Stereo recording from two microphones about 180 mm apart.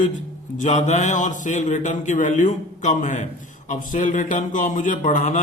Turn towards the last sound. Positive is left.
turn(degrees=45)  # may be behind; listen again after turning